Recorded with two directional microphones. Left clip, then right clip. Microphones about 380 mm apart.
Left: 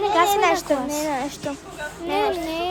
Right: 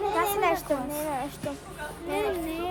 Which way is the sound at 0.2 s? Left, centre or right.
Left.